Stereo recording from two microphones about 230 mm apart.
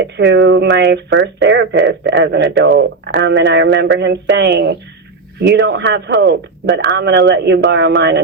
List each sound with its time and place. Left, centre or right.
0.0 s speech: right